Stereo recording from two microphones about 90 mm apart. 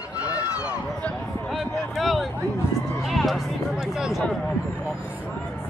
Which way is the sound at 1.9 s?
Centre (ahead or behind).